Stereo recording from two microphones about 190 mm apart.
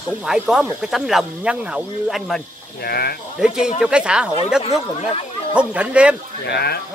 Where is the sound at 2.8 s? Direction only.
55° left (ahead or behind).